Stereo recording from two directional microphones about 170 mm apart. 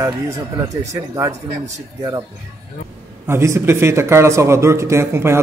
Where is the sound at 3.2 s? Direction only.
15° right (ahead or behind).